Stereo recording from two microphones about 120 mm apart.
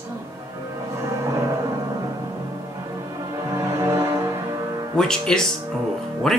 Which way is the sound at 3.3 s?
25° right (ahead or behind).